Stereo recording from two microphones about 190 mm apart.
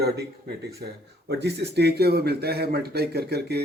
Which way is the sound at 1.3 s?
60° right (ahead or behind).